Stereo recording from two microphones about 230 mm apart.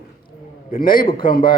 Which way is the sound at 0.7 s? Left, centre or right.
Left.